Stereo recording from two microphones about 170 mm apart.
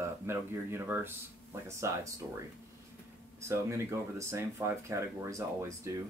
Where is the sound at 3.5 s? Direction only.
15° right (ahead or behind).